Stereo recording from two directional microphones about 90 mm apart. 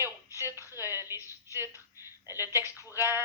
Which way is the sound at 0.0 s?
30° right (ahead or behind).